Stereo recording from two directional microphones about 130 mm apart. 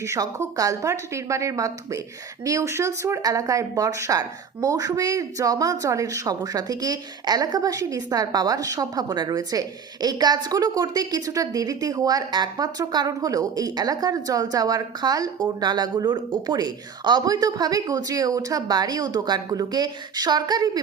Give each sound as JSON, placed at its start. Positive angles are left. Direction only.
{"t": 0.0, "sound": "a woman's voice", "side_deg": -25}